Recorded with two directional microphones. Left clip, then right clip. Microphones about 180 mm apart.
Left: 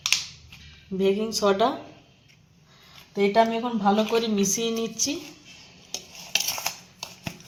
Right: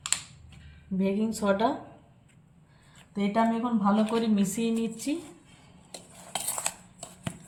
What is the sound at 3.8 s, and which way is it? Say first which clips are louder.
Speech: left 5 dB; 35° left (ahead or behind).